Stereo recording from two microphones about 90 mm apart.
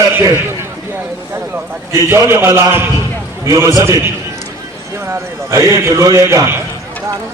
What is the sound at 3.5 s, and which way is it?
Speech, 40° right (ahead or behind).